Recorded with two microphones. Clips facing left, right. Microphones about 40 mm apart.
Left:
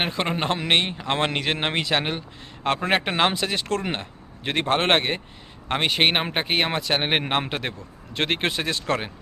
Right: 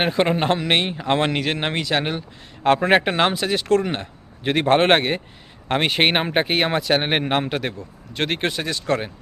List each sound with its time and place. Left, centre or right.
0.0 s speech: centre
2.6 s speech: centre